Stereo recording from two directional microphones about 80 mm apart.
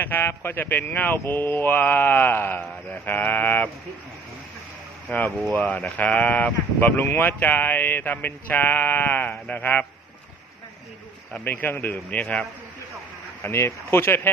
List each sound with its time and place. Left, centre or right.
0.0 s speech: left
5.0 s speech: left
11.3 s speech: left
13.4 s speech: left